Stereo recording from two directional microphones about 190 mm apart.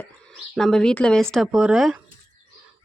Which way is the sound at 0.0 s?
Centre (ahead or behind).